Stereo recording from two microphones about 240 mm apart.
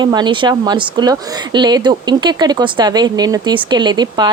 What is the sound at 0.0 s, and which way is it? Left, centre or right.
Speech, centre.